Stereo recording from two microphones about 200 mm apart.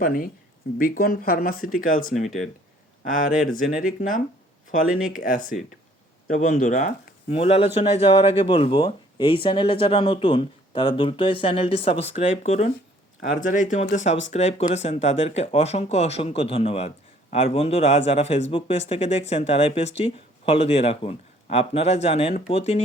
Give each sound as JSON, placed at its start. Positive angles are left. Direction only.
{"t": 0.0, "sound": "speech", "side_deg": 45}